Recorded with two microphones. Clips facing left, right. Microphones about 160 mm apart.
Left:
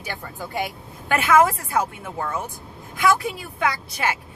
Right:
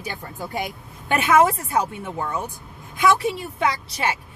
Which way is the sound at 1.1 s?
20° right (ahead or behind).